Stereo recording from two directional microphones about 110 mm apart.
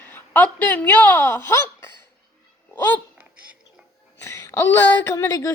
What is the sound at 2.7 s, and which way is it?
Speech, 20° left (ahead or behind).